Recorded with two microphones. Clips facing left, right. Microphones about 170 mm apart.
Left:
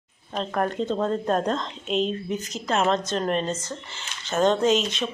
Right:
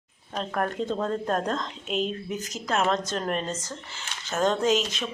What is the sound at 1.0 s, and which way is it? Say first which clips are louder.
Speech: left 4 dB; 5° left (ahead or behind).